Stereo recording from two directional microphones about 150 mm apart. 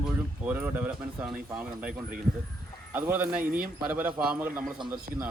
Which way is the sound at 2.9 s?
10° right (ahead or behind).